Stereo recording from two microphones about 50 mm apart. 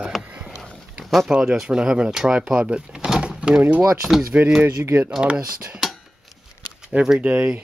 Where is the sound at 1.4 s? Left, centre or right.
Centre.